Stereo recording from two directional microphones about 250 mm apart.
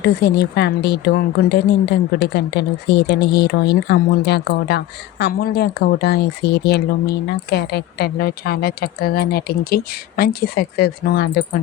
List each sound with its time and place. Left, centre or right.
0.0 s speech: left